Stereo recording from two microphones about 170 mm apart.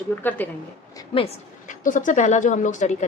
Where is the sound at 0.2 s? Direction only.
10° left (ahead or behind).